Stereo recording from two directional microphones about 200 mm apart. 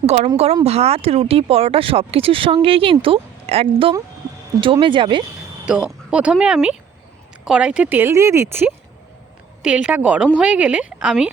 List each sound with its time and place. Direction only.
0.0 s speech: 30° right (ahead or behind)
5.6 s speech: 5° right (ahead or behind)